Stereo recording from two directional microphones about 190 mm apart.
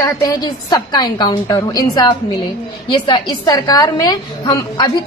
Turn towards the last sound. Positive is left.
turn(degrees=20)  # may be behind; listen again after turning